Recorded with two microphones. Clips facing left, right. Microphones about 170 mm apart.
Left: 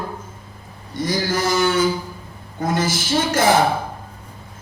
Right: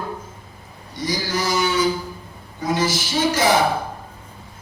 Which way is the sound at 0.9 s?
50° left (ahead or behind).